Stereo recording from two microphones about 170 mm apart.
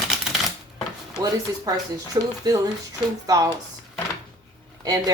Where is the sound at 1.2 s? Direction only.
20° right (ahead or behind).